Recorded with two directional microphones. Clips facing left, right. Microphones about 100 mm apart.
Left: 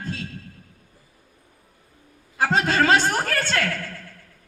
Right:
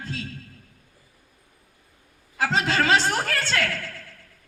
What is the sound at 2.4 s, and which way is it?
Speech, 50° left (ahead or behind).